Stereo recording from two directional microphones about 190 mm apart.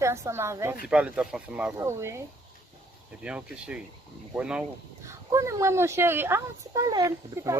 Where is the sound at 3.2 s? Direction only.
5° right (ahead or behind).